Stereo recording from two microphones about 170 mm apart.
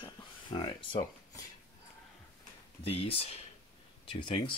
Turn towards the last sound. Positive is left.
turn(degrees=30)  # may be behind; listen again after turning